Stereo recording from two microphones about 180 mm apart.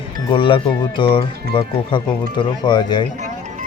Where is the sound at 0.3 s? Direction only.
30° left (ahead or behind).